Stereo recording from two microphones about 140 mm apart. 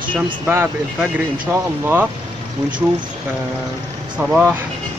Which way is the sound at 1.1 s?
10° right (ahead or behind).